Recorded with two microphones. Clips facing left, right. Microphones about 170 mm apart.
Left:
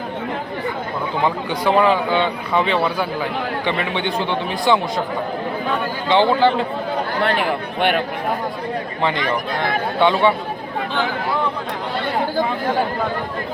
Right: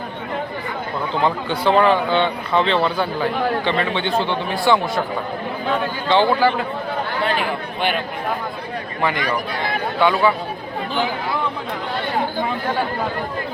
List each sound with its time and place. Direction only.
1.2 s speech: 10° left (ahead or behind)
6.1 s a man's voice: 20° left (ahead or behind)
7.2 s speech: 65° left (ahead or behind)
9.0 s a man's voice: 25° left (ahead or behind)